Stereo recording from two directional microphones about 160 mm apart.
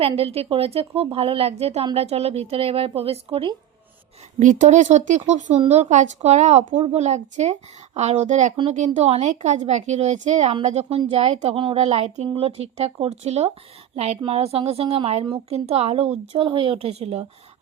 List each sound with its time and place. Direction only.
0.2 s speech: 40° right (ahead or behind)
4.4 s a woman's voice: 50° right (ahead or behind)